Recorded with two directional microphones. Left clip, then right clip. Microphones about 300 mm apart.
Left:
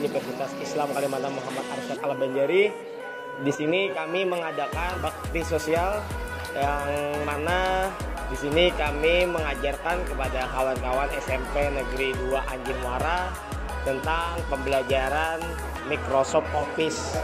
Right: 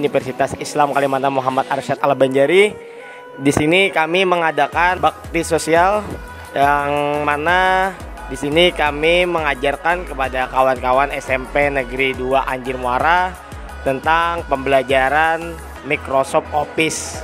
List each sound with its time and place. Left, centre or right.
0.0 s speech: right
12.1 s speech: right